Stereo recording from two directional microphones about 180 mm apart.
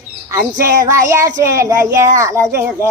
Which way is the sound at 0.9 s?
15° right (ahead or behind).